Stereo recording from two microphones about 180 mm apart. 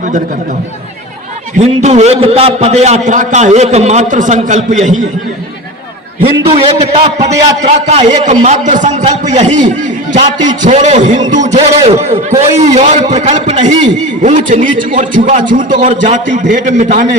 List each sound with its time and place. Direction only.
1.5 s a man's voice: 40° right (ahead or behind)
6.2 s a man's voice: 30° right (ahead or behind)